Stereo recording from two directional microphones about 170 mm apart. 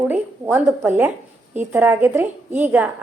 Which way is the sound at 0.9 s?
10° right (ahead or behind).